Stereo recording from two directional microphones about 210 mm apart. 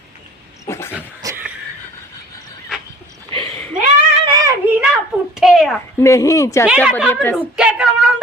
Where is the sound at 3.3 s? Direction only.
25° right (ahead or behind).